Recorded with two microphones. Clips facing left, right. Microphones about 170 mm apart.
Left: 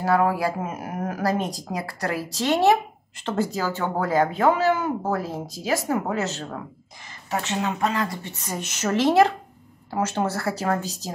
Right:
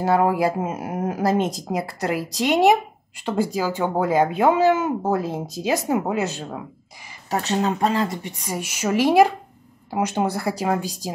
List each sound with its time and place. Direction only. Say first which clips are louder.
0.0 s speech: right 2 dB; 25° right (ahead or behind)
7.2 s speech: right 4 dB; 35° right (ahead or behind)
8.2 s speech: right 3 dB; 15° right (ahead or behind)